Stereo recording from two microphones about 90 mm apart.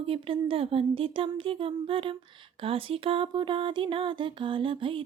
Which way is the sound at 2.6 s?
90° right.